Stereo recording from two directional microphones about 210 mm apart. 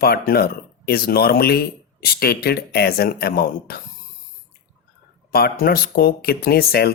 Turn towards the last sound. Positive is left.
turn(degrees=45)  # may be behind; listen again after turning